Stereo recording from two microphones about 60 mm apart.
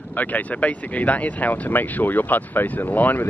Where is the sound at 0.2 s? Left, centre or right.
Left.